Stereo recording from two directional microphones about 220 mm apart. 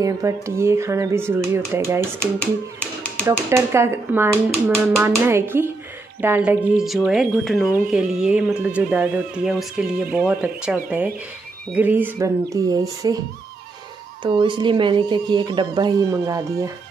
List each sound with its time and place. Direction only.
0.0 s speech: 15° right (ahead or behind)
2.4 s speech: 5° left (ahead or behind)
3.4 s speech: 10° right (ahead or behind)
14.2 s speech: 20° right (ahead or behind)